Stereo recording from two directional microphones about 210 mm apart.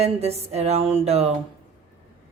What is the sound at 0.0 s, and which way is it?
A woman's voice, 30° right (ahead or behind).